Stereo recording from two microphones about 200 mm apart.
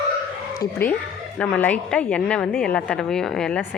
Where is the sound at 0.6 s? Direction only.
10° left (ahead or behind).